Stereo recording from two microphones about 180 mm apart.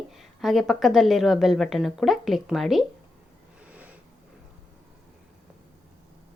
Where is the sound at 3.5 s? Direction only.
5° right (ahead or behind).